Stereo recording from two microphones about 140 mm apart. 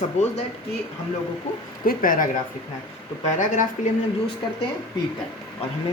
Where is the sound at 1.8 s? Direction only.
90° left.